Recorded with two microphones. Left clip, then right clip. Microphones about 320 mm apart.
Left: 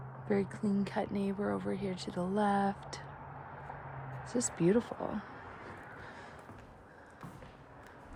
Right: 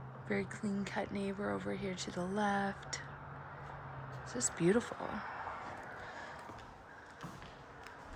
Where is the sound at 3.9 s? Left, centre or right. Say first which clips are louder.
Left 8 dB; centre.